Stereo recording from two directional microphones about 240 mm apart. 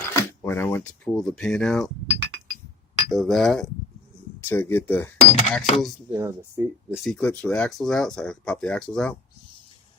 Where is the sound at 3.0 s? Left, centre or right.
Centre.